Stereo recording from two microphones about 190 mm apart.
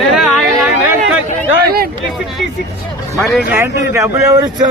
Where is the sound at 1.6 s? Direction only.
55° right (ahead or behind).